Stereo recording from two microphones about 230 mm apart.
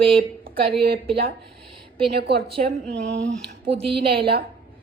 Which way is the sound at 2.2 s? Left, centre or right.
Right.